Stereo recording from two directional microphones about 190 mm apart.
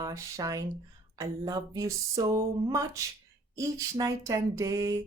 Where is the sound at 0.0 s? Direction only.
15° right (ahead or behind).